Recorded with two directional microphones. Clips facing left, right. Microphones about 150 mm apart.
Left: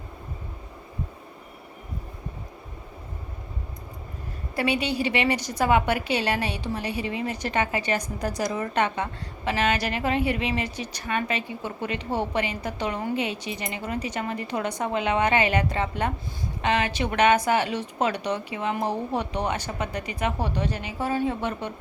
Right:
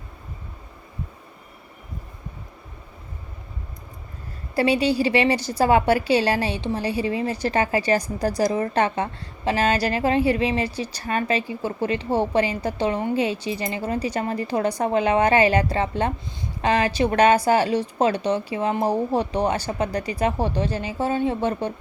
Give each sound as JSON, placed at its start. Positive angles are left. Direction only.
{"t": 4.5, "sound": "a woman's voice", "side_deg": -30}